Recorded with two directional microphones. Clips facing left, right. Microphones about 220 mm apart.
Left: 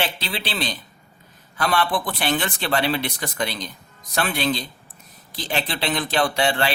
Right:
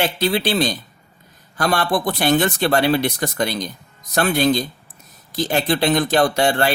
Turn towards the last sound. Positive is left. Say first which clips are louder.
# right 4 dB
turn(degrees=-45)  # may be behind; listen again after turning